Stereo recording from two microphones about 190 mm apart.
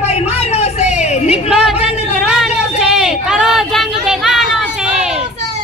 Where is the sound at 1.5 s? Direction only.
5° right (ahead or behind).